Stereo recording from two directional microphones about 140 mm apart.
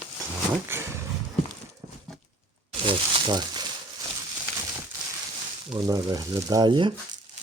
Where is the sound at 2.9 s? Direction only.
35° right (ahead or behind).